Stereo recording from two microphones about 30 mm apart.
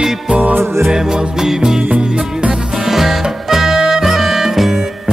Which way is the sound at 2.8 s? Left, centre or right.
Centre.